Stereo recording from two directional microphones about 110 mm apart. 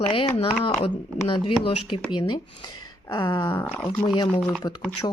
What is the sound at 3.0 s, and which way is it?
Speech, 40° left (ahead or behind).